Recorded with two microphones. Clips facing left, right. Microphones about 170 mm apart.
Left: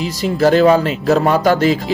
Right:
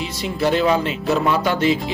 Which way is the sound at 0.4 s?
40° left (ahead or behind).